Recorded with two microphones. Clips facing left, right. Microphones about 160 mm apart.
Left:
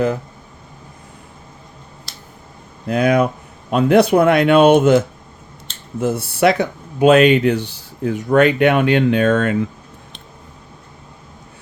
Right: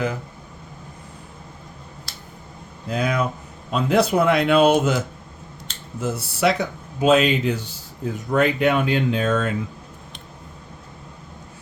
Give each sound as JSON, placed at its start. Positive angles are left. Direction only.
{"t": 2.8, "sound": "speech", "side_deg": 60}